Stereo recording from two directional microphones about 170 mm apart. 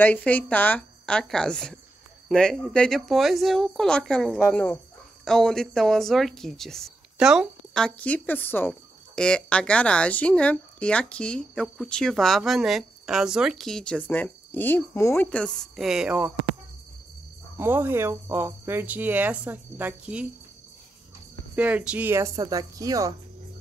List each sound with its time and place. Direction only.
0.0 s speech: 10° left (ahead or behind); by 16.3 s 5° right (ahead or behind)
17.6 s speech: 10° right (ahead or behind)
21.5 s speech: 10° right (ahead or behind)